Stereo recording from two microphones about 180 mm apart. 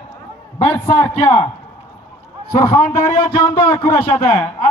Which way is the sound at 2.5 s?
15° left (ahead or behind).